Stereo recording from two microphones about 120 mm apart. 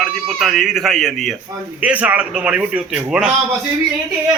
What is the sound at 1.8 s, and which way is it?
A man's voice, 15° right (ahead or behind).